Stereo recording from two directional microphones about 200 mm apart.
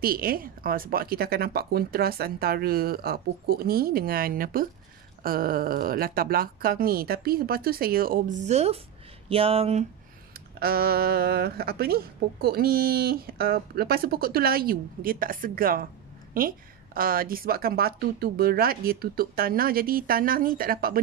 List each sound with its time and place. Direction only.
0.0 s speech: 50° right (ahead or behind); by 9.8 s 30° right (ahead or behind)
10.6 s speech: 50° right (ahead or behind)